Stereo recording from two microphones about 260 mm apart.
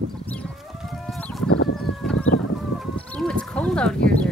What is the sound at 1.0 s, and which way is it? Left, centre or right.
Chicken, centre.